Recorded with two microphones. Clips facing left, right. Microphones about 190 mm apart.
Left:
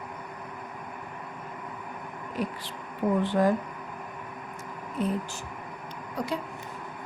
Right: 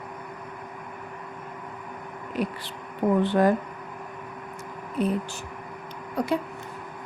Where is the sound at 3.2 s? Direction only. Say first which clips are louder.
Right 2 dB; 65° right (ahead or behind).